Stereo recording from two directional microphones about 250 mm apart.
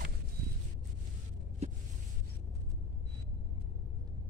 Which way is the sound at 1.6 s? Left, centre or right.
Right.